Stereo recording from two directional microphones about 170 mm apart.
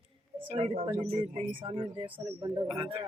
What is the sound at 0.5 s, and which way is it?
Speech, 35° right (ahead or behind).